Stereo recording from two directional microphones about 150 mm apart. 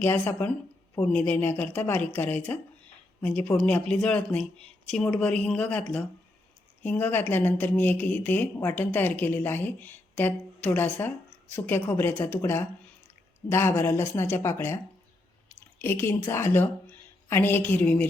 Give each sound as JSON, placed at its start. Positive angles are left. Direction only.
{"t": 0.0, "sound": "speech", "side_deg": 15}